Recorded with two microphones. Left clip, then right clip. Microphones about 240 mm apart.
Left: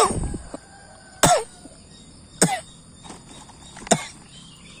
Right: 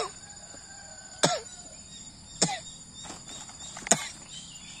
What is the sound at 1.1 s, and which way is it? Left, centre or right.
Cough, left.